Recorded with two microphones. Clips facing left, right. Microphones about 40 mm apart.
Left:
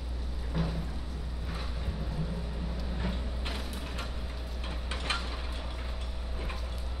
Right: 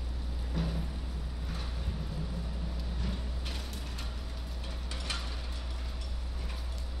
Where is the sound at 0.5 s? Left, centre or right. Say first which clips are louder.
Left 2 dB; centre.